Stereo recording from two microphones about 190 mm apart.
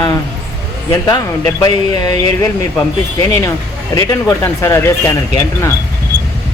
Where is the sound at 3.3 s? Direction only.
15° left (ahead or behind).